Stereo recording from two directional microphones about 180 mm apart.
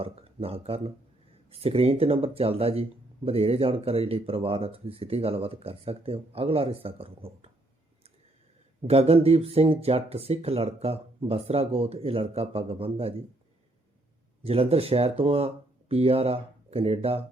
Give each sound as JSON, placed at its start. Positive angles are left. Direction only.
{"t": 0.0, "sound": "speech", "side_deg": -35}
{"t": 8.9, "sound": "speech", "side_deg": -35}
{"t": 14.4, "sound": "speech", "side_deg": -35}